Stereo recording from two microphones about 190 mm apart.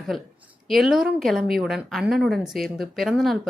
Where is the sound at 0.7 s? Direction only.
Centre (ahead or behind).